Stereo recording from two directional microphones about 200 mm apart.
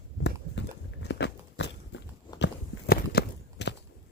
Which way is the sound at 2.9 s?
55° left (ahead or behind).